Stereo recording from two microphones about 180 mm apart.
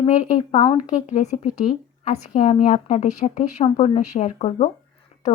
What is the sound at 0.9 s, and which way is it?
A woman's voice, 40° left (ahead or behind).